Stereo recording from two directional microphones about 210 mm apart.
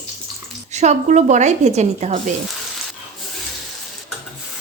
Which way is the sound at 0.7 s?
35° right (ahead or behind).